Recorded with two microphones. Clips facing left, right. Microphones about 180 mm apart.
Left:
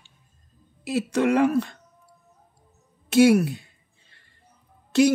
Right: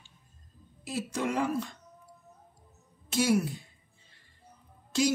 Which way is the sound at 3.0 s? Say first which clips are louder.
Left 10 dB; 70° left (ahead or behind).